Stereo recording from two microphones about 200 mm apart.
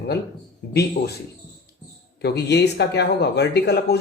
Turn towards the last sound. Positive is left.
turn(degrees=55)  # may be behind; listen again after turning